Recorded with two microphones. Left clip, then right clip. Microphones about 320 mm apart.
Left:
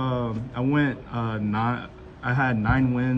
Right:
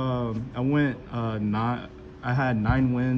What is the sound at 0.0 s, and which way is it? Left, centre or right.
Speech, centre.